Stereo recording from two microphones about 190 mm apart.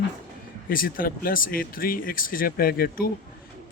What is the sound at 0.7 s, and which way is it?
A man's voice, 50° left (ahead or behind).